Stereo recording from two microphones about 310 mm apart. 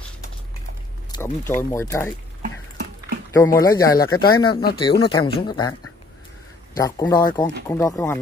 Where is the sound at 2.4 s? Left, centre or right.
Right.